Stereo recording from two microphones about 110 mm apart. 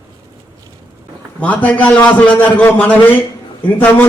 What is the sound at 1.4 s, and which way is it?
A man's voice, 15° left (ahead or behind).